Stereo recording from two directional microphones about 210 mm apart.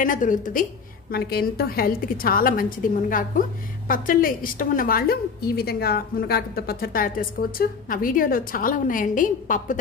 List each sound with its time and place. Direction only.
0.0 s a woman's voice: 40° left (ahead or behind)